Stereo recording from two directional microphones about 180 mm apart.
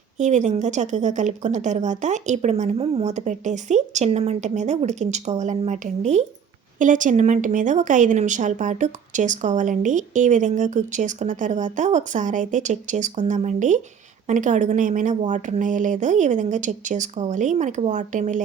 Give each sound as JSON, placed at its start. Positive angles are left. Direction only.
{"t": 0.2, "sound": "a woman's voice", "side_deg": -40}